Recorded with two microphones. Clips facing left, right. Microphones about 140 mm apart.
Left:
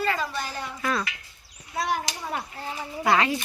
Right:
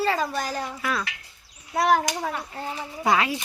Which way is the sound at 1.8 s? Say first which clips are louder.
Right 7 dB; 75° right (ahead or behind).